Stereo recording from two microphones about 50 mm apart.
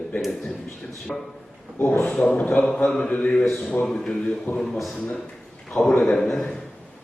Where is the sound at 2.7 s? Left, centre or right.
Centre.